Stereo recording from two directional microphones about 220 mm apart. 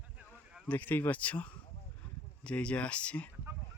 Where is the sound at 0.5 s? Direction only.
5° left (ahead or behind).